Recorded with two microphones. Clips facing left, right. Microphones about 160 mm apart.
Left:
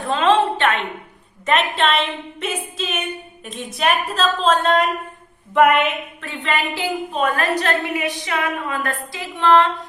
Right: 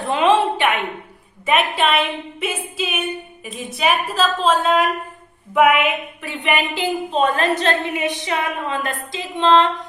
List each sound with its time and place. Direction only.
0.0 s a sound: 15° right (ahead or behind)
1.5 s a woman's voice: 5° right (ahead or behind)
6.2 s a woman's voice: 15° right (ahead or behind)